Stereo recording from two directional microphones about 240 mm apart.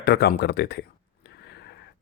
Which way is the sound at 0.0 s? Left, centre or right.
Left.